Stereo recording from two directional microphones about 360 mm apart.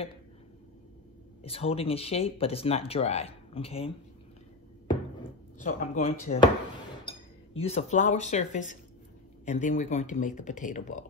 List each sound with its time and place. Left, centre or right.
1.4 s speech: centre
5.8 s speech: centre